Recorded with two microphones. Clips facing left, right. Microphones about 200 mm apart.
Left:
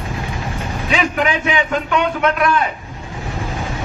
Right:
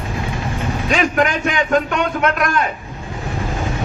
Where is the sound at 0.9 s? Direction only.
45° right (ahead or behind).